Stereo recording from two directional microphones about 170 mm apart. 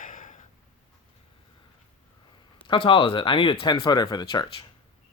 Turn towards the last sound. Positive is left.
turn(degrees=25)  # may be behind; listen again after turning